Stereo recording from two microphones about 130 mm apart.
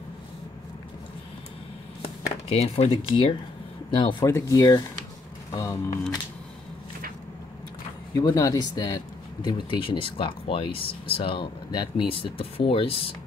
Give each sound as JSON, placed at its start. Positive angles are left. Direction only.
{"t": 2.5, "sound": "speech", "side_deg": 55}
{"t": 8.2, "sound": "speech", "side_deg": 25}